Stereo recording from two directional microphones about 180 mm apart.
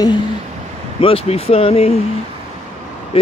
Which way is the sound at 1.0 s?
30° left (ahead or behind).